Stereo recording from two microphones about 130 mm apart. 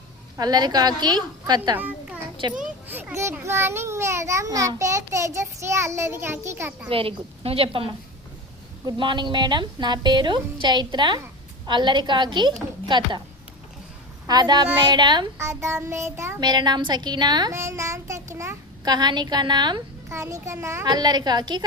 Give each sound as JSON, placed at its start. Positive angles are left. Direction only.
{"t": 0.3, "sound": "a woman's voice", "side_deg": -30}
{"t": 3.2, "sound": "a child's voice", "side_deg": -20}
{"t": 6.8, "sound": "a woman's voice", "side_deg": -45}
{"t": 8.9, "sound": "a woman's voice", "side_deg": -35}
{"t": 14.3, "sound": "a woman's voice", "side_deg": -30}
{"t": 15.4, "sound": "a child's voice", "side_deg": -20}
{"t": 16.4, "sound": "a woman's voice", "side_deg": -35}
{"t": 17.5, "sound": "a child's voice", "side_deg": -20}
{"t": 20.1, "sound": "a child's voice", "side_deg": -20}
{"t": 20.8, "sound": "a woman's voice", "side_deg": -30}